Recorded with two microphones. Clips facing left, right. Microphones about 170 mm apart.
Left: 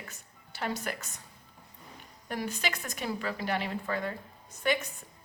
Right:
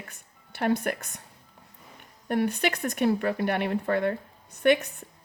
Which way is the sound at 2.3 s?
60° right (ahead or behind).